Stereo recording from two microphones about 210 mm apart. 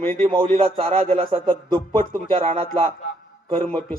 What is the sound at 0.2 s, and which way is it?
Speech, 25° right (ahead or behind).